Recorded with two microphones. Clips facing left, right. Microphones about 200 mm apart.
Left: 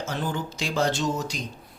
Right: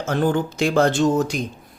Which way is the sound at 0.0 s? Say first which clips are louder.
Right 9 dB; 55° right (ahead or behind).